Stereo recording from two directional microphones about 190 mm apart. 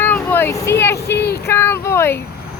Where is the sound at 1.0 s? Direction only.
60° left (ahead or behind).